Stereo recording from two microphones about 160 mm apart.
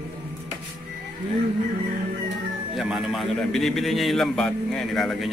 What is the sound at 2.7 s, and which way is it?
A man's voice, centre (ahead or behind).